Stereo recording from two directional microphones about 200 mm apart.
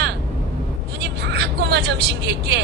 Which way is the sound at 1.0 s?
55° right (ahead or behind).